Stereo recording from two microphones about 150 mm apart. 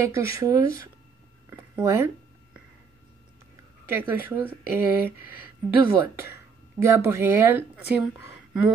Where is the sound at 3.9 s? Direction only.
15° right (ahead or behind).